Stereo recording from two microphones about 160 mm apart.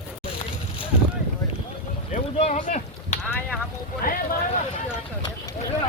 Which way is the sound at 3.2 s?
10° left (ahead or behind).